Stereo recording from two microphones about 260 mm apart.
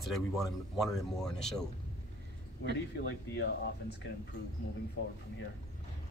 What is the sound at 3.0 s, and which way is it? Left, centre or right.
Speech, left.